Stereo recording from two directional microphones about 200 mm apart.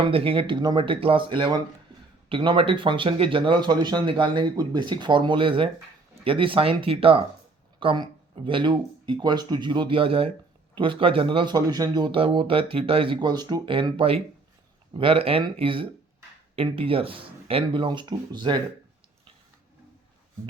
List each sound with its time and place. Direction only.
0.0 s speech: 25° right (ahead or behind)